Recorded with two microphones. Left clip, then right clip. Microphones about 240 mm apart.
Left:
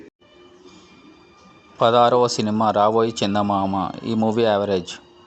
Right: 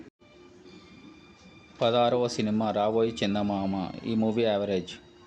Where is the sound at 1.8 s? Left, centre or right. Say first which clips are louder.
Left 9 dB; centre.